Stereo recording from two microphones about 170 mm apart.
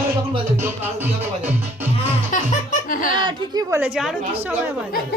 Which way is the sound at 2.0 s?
45° left (ahead or behind).